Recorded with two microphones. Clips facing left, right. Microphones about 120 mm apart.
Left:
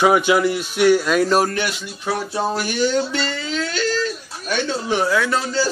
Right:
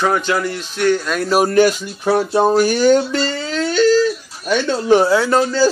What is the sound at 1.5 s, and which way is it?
Speech, 40° right (ahead or behind).